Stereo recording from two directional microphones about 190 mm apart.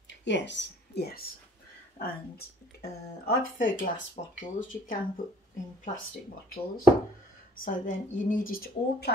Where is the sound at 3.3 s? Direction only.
45° left (ahead or behind).